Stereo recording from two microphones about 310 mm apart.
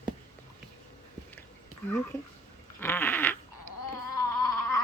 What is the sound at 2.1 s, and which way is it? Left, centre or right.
Speech, centre.